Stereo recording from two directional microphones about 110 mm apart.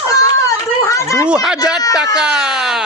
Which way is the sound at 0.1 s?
35° left (ahead or behind).